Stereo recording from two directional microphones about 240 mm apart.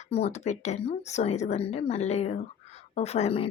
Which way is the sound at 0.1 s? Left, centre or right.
Left.